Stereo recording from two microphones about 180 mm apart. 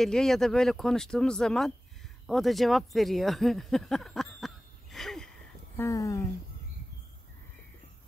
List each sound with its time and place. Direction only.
0.0 s speech: centre (ahead or behind)
4.9 s a sound: centre (ahead or behind)
5.8 s speech: 15° left (ahead or behind)